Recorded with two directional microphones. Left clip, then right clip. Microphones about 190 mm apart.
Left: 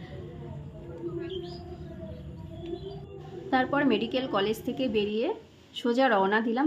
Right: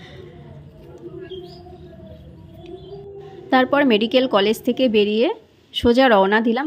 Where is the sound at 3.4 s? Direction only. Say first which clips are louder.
Right 9 dB; 40° right (ahead or behind).